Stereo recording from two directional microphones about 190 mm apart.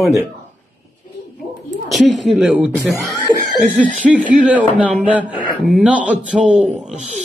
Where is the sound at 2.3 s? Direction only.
5° right (ahead or behind).